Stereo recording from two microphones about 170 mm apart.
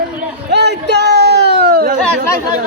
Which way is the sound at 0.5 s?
80° right.